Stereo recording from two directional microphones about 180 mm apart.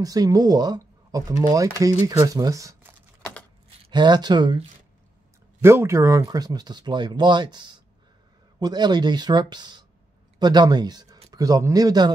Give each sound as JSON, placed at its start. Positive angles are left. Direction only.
{"t": 0.0, "sound": "speech", "side_deg": -20}
{"t": 3.8, "sound": "speech", "side_deg": -25}
{"t": 5.6, "sound": "speech", "side_deg": -15}